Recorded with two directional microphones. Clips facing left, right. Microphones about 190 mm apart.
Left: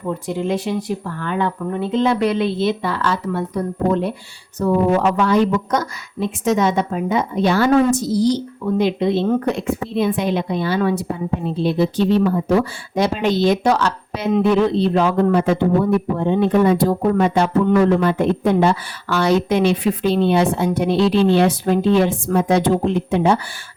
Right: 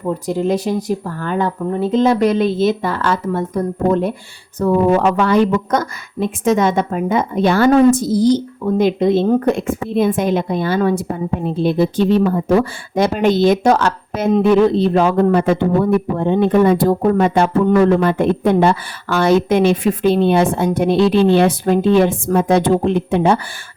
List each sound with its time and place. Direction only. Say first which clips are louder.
0.0 s speech: right 4 dB; 40° right (ahead or behind)
4.6 s speech: right 3 dB; 55° right (ahead or behind)